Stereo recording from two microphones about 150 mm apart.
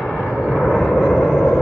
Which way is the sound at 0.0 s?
Centre (ahead or behind).